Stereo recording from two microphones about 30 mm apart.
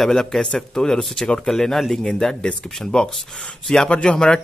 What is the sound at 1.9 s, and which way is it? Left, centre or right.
Speech, left.